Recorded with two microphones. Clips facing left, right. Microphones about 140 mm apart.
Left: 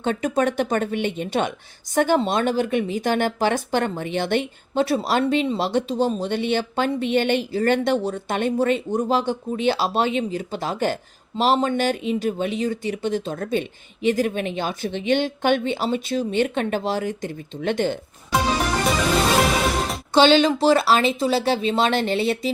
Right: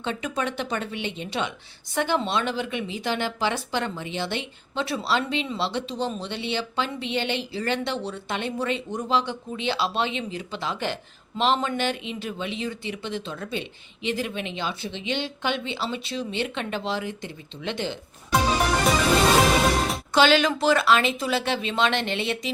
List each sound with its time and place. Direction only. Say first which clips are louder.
0.0 s a woman's voice: left 7 dB; 45° left (ahead or behind)
20.1 s speech: left 4 dB; 30° left (ahead or behind)